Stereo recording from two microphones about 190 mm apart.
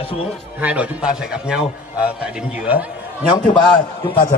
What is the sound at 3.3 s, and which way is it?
Speech, 25° left (ahead or behind).